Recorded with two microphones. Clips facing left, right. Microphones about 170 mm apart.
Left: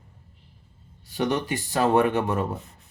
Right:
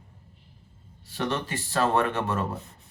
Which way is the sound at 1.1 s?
15° left (ahead or behind).